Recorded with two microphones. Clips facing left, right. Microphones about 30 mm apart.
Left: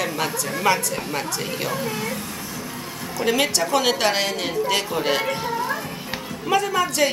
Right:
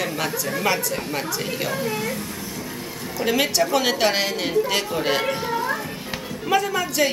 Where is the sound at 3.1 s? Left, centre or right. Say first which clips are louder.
Even; centre.